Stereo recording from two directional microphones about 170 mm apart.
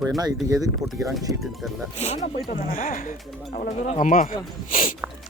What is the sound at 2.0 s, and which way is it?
Speech, 40° left (ahead or behind).